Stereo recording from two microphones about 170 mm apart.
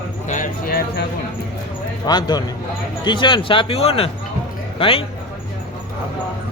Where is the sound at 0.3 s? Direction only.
50° left (ahead or behind).